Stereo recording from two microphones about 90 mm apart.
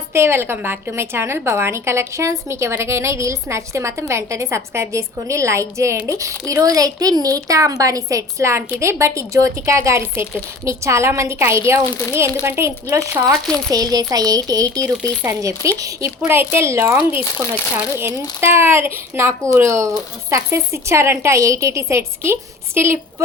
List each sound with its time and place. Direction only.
0.1 s a woman's voice: 30° right (ahead or behind)
13.7 s a woman's voice: 45° right (ahead or behind)
16.2 s a woman's voice: 25° right (ahead or behind)